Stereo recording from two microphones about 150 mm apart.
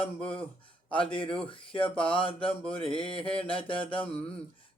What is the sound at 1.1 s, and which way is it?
Speech, 35° left (ahead or behind).